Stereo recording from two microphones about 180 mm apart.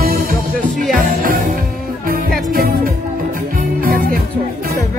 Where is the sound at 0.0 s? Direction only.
55° right (ahead or behind).